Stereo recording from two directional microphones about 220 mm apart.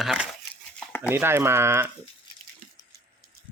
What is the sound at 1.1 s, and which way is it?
Speech, 10° right (ahead or behind).